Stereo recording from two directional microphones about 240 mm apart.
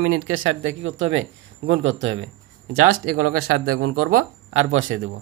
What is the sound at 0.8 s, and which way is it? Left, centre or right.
Speech, right.